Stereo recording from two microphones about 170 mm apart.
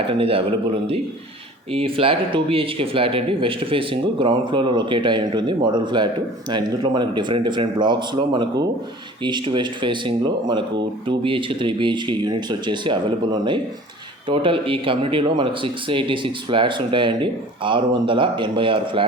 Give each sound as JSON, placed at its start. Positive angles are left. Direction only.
{"t": 0.1, "sound": "speech", "side_deg": -35}